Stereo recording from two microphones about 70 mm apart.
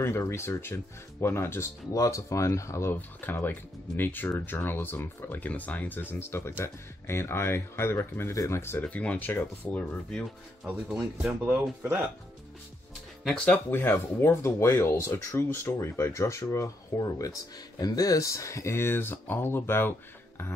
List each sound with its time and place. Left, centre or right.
0.0 s speech: left
2.0 s speech: left
2.9 s speech: left
8.8 s speech: centre
10.6 s speech: centre
11.4 s speech: right
13.5 s speech: left